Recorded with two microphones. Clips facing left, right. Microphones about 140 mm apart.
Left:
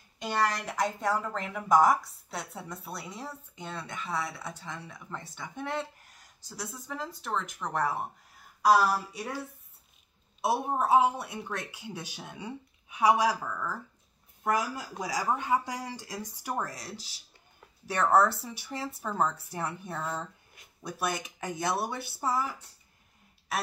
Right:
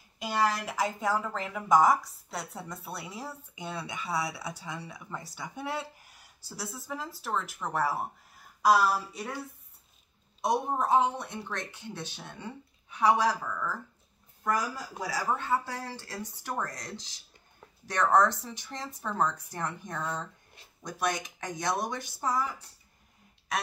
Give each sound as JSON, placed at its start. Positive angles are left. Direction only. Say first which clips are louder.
{"t": 0.2, "sound": "a woman's voice", "louder": "right 1 dB", "side_deg": -5}
{"t": 10.4, "sound": "speech", "louder": "even", "side_deg": 5}
{"t": 23.5, "sound": "speech", "louder": "even", "side_deg": 5}